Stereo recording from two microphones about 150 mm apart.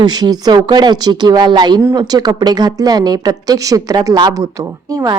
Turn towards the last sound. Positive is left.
turn(degrees=-25)  # may be behind; listen again after turning